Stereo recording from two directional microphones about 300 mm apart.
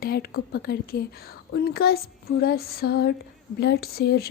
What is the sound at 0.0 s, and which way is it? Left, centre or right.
Speech, left.